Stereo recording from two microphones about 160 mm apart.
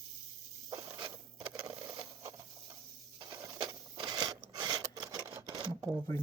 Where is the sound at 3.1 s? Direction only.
25° right (ahead or behind).